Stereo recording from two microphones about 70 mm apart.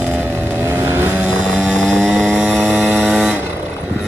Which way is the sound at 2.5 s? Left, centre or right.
Centre.